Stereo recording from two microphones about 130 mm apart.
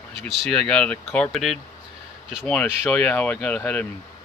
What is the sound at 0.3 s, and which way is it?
Speech, 5° left (ahead or behind).